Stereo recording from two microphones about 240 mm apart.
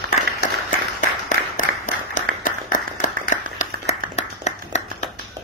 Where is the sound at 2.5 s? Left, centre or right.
Left.